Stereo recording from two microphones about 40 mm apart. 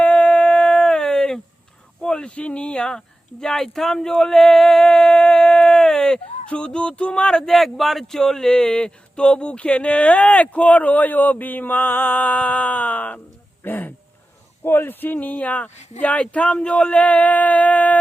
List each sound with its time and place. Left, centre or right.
0.0 s a sound: left; by 1.4 s centre
2.0 s speech: left
6.1 s speech: left
7.4 s speech: centre; by 13.9 s left
14.6 s speech: left